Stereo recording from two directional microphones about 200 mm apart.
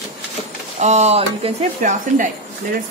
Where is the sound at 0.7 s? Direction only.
35° right (ahead or behind).